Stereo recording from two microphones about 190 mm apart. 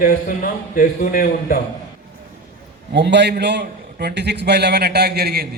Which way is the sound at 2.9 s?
65° right (ahead or behind).